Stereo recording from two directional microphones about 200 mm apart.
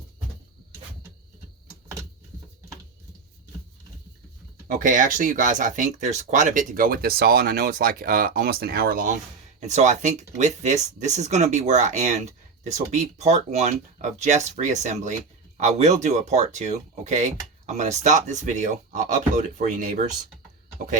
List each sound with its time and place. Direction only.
4.7 s speech: 40° right (ahead or behind)
9.6 s speech: 35° right (ahead or behind)